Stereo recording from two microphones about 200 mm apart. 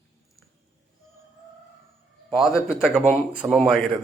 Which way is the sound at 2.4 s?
Centre (ahead or behind).